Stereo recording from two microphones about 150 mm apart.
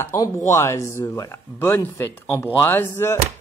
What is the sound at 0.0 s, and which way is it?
A man's voice, 20° left (ahead or behind).